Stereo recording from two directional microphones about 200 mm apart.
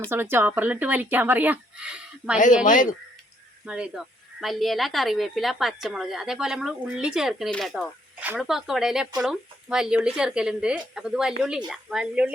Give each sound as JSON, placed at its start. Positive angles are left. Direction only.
{"t": 0.1, "sound": "speech", "side_deg": -10}
{"t": 2.6, "sound": "speech", "side_deg": 40}
{"t": 3.7, "sound": "speech", "side_deg": -5}